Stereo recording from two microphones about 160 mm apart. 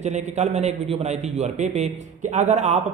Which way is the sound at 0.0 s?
45° right (ahead or behind).